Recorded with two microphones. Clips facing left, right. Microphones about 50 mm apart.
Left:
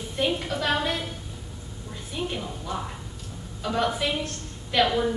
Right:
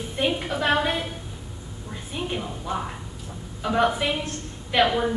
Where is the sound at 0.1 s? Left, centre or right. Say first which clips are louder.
Right 1 dB; centre.